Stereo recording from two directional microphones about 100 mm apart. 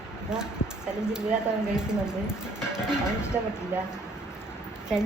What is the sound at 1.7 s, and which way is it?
Speech, 5° right (ahead or behind).